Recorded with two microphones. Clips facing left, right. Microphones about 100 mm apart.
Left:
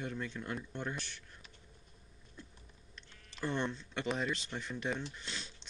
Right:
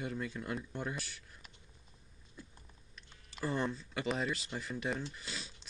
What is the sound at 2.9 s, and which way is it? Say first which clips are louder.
Speech: right 1 dB; 5° right (ahead or behind).